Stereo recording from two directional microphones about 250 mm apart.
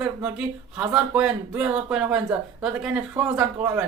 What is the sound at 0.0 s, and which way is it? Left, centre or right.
Speech, centre.